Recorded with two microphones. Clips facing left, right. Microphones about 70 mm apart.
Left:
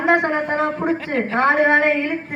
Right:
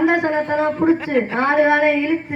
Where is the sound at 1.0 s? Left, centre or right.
Centre.